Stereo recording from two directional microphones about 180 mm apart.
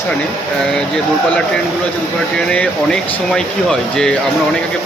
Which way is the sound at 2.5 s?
5° left (ahead or behind).